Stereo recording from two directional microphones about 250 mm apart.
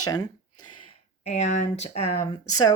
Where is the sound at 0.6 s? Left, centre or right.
Left.